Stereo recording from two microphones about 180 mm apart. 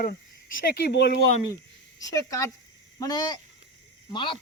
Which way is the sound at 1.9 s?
20° left (ahead or behind).